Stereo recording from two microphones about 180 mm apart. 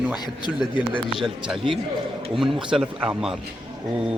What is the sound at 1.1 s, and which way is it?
Speech, centre (ahead or behind).